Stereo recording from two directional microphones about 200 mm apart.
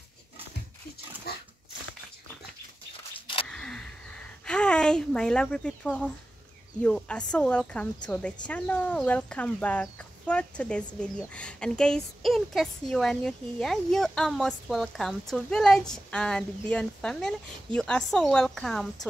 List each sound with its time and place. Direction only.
1.3 s dog: 50° left (ahead or behind)
3.4 s a sound: 5° left (ahead or behind)
6.8 s speech: 5° left (ahead or behind)